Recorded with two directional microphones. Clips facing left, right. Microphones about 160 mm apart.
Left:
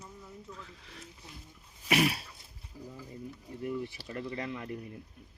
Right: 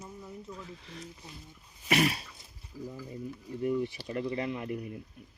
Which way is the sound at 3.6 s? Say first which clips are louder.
Right 6 dB; 20° right (ahead or behind).